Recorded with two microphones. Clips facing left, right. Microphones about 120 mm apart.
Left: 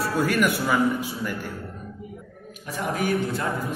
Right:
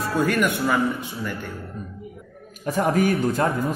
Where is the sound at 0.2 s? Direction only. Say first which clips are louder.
Right 2 dB; 5° left (ahead or behind).